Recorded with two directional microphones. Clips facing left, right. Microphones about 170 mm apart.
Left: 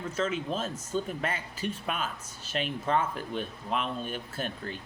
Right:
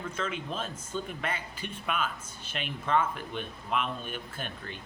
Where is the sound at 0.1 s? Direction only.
40° left (ahead or behind).